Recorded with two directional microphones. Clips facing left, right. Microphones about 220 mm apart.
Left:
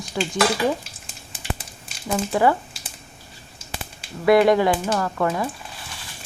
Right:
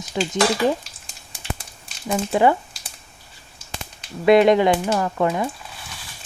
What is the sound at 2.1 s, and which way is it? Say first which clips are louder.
Speech: right 2 dB; 20° right (ahead or behind).